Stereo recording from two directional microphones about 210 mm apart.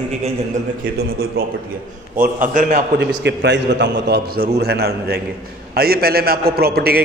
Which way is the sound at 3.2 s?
55° right (ahead or behind).